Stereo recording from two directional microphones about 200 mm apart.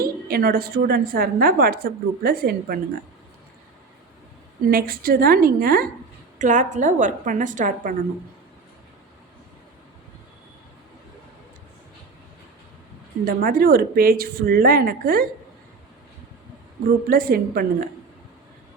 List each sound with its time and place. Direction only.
0.0 s a woman's voice: 50° right (ahead or behind)
4.7 s a woman's voice: 45° right (ahead or behind)
13.2 s a woman's voice: 45° right (ahead or behind)
17.1 s a woman's voice: 45° right (ahead or behind)